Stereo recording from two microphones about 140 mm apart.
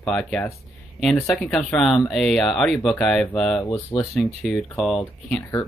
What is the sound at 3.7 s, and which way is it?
Speech, 35° left (ahead or behind).